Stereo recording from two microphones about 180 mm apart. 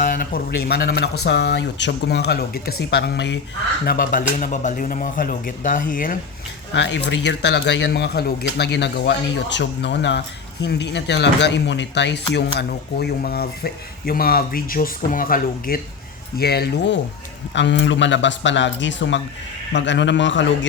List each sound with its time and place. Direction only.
0.0 s speech: 50° left (ahead or behind); by 3.3 s 70° left (ahead or behind)
3.8 s speech: 50° left (ahead or behind)
6.7 s speech: 75° left (ahead or behind)
17.5 s a man's voice: 85° left